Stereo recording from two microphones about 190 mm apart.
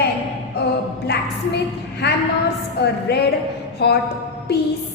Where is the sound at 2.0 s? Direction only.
60° left (ahead or behind).